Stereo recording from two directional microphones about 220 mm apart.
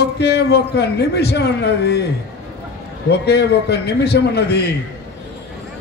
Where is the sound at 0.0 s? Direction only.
50° left (ahead or behind).